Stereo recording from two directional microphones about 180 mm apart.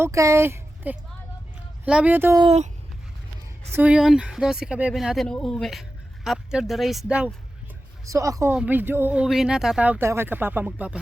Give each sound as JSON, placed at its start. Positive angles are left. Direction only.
{"t": 0.0, "sound": "speech", "side_deg": -15}
{"t": 2.4, "sound": "speech", "side_deg": -35}
{"t": 3.7, "sound": "speech", "side_deg": -10}
{"t": 8.0, "sound": "speech", "side_deg": -15}